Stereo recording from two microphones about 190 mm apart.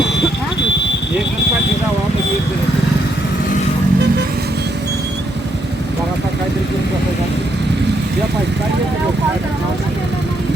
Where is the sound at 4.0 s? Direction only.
60° right (ahead or behind).